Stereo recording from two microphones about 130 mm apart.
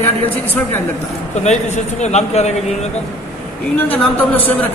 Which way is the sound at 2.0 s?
60° left (ahead or behind).